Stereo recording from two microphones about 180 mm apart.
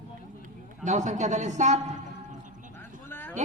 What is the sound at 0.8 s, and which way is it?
Speech, 40° right (ahead or behind).